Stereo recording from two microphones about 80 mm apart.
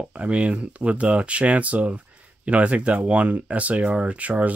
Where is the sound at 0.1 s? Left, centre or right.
Centre.